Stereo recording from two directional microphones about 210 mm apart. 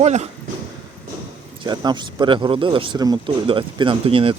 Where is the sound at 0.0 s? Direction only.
30° right (ahead or behind).